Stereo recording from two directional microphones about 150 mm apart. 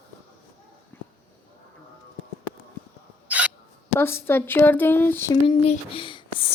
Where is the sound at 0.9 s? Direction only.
15° left (ahead or behind).